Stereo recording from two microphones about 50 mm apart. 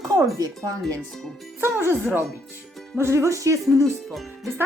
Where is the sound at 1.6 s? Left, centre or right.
Right.